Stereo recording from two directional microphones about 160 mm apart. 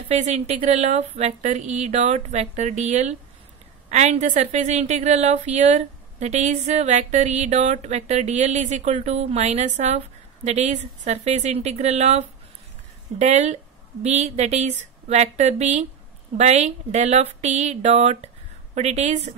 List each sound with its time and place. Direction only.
0.1 s a woman's voice: 45° right (ahead or behind)